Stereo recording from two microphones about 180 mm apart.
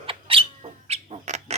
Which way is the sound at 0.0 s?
30° right (ahead or behind).